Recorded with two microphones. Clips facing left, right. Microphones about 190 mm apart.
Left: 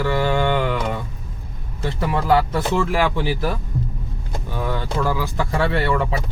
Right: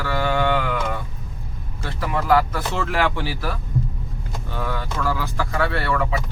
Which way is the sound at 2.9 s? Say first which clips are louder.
Left 2 dB; 15° left (ahead or behind).